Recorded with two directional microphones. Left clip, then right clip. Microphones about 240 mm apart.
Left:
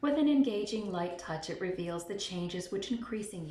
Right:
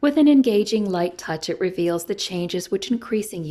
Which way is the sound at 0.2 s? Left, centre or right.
Right.